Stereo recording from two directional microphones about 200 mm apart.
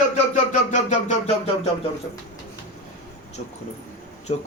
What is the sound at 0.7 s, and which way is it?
Speech, 35° left (ahead or behind).